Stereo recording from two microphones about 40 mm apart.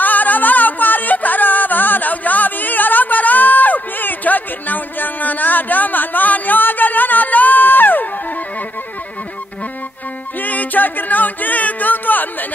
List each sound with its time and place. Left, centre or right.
0.0 s music: left
10.4 s music: left